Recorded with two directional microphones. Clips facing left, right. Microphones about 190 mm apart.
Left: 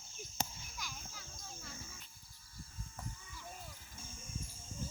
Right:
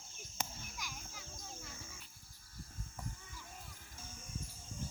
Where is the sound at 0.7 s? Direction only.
15° right (ahead or behind).